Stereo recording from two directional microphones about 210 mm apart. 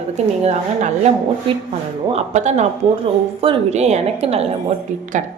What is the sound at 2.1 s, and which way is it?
Speech, 30° right (ahead or behind).